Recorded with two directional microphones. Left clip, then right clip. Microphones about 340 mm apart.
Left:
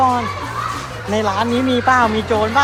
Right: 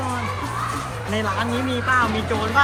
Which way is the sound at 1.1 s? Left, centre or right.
Centre.